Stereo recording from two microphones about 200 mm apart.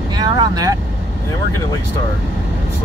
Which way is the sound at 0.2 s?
20° right (ahead or behind).